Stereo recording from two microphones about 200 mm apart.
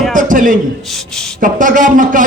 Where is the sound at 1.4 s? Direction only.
40° right (ahead or behind).